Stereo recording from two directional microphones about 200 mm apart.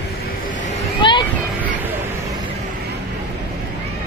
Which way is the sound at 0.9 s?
25° left (ahead or behind).